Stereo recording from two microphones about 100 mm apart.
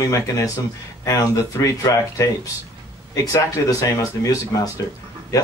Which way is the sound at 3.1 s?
35° left (ahead or behind).